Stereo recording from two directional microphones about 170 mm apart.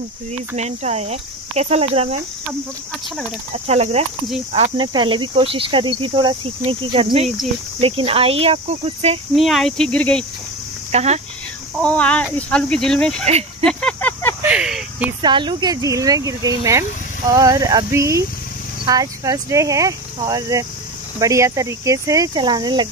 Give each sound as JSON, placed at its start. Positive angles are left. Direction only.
{"t": 0.6, "sound": "speech", "side_deg": -40}
{"t": 3.5, "sound": "speech", "side_deg": -40}
{"t": 9.3, "sound": "speech", "side_deg": 0}
{"t": 10.9, "sound": "speech", "side_deg": -40}
{"t": 11.7, "sound": "speech", "side_deg": 5}
{"t": 13.2, "sound": "speech", "side_deg": -40}
{"t": 13.7, "sound": "a sound", "side_deg": 5}
{"t": 14.4, "sound": "a sound", "side_deg": -5}
{"t": 15.2, "sound": "speech", "side_deg": -25}